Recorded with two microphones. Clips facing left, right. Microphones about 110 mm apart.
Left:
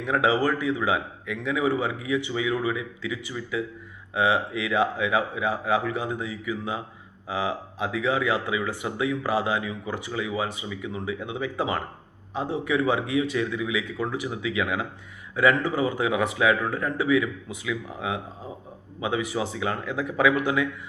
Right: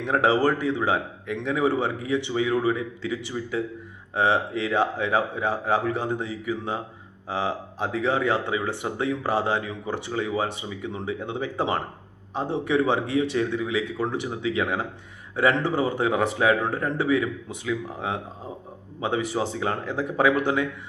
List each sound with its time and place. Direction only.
0.1 s speech: 30° right (ahead or behind)
0.9 s a man's voice: 40° right (ahead or behind)